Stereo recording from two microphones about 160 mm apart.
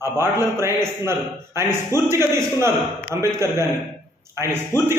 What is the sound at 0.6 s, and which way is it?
Speech, 15° right (ahead or behind).